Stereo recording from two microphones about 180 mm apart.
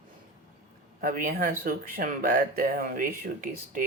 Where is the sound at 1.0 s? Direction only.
50° right (ahead or behind).